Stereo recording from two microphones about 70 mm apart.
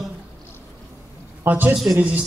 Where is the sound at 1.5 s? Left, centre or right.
Right.